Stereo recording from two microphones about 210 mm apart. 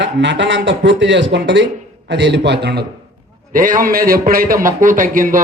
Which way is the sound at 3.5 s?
40° right (ahead or behind).